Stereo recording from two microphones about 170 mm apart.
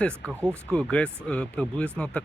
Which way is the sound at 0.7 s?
5° left (ahead or behind).